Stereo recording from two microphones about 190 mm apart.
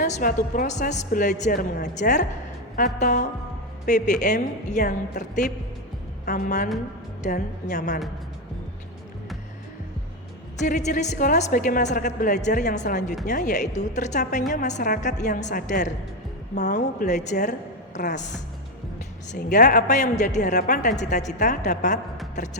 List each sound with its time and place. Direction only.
0.0 s a woman's voice: 45° left (ahead or behind)
10.6 s a woman's voice: 40° left (ahead or behind)